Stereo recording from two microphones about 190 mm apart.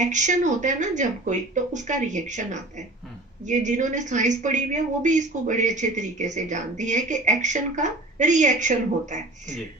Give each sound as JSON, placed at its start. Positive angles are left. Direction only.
{"t": 0.0, "sound": "a woman's voice", "side_deg": -40}